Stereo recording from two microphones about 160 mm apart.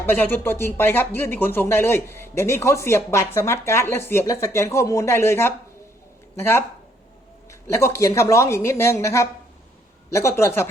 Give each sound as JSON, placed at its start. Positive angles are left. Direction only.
{"t": 0.0, "sound": "speech", "side_deg": 15}
{"t": 7.7, "sound": "speech", "side_deg": 15}